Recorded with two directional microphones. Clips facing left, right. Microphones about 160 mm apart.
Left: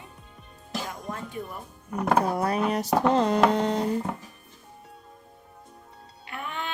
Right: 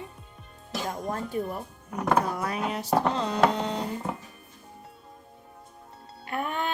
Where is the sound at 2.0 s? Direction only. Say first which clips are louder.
Left 2 dB; 35° left (ahead or behind); by 3.8 s 50° left (ahead or behind).